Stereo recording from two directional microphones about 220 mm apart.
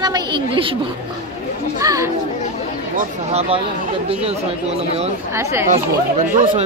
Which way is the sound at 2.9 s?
30° right (ahead or behind).